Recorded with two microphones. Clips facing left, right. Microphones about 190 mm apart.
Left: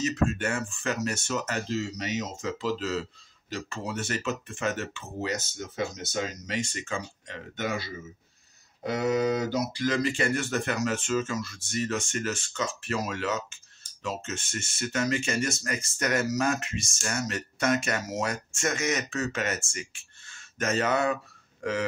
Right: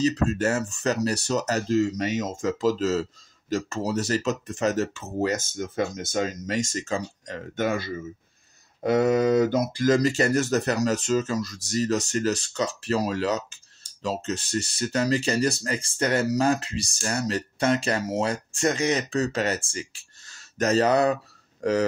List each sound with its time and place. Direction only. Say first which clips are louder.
0.0 s speech: right 5 dB; 35° right (ahead or behind)